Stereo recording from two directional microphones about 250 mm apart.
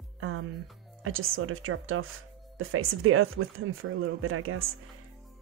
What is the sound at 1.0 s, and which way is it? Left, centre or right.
Speech, right.